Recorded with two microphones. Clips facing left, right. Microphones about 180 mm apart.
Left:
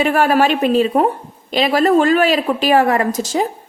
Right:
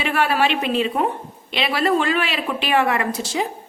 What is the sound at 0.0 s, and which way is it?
A woman's voice, 45° left (ahead or behind).